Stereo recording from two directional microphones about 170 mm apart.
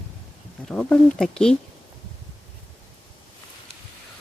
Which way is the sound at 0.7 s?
5° left (ahead or behind).